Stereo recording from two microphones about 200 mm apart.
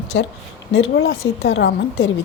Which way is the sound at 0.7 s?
75° left (ahead or behind).